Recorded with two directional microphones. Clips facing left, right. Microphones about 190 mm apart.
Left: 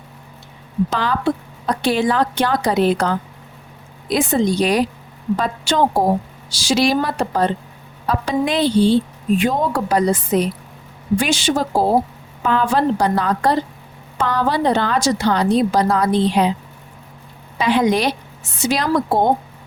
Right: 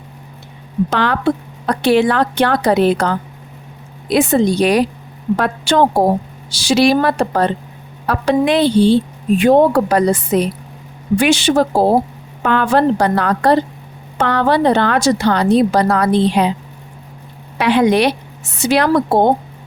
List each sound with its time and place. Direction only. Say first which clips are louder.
0.9 s a woman's voice: right 5 dB; 70° right (ahead or behind)
17.6 s a woman's voice: right 4 dB; 65° right (ahead or behind)